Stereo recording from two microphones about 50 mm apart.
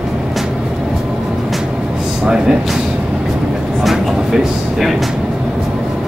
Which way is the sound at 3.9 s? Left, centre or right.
Centre.